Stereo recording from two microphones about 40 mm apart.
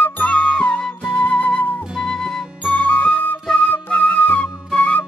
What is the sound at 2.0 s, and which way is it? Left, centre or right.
Music, centre.